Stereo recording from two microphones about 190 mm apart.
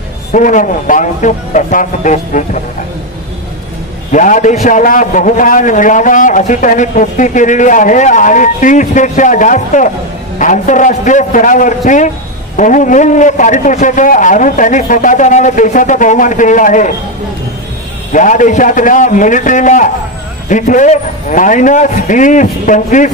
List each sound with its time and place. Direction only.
0.3 s a man's voice: 45° left (ahead or behind)
4.1 s a man's voice: 40° left (ahead or behind)
18.1 s a man's voice: 40° left (ahead or behind)